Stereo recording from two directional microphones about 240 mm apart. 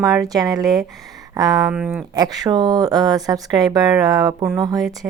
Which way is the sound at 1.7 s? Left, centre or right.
Centre.